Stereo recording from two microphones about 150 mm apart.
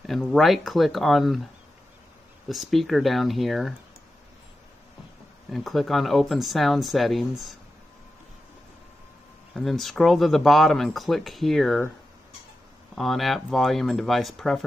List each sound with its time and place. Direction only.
0.0 s speech: centre (ahead or behind)
2.4 s speech: centre (ahead or behind)
5.5 s speech: centre (ahead or behind)
9.5 s speech: centre (ahead or behind)
12.9 s speech: centre (ahead or behind)